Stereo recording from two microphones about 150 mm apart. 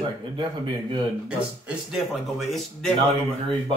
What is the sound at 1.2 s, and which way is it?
A man's voice, 5° right (ahead or behind).